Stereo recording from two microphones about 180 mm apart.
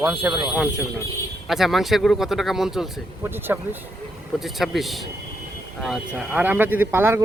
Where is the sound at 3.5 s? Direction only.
10° right (ahead or behind).